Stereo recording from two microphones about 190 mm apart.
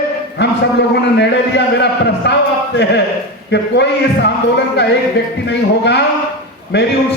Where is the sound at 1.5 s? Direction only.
65° left (ahead or behind).